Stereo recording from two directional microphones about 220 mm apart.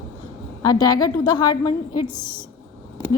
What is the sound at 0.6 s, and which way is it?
A woman's voice, 15° left (ahead or behind).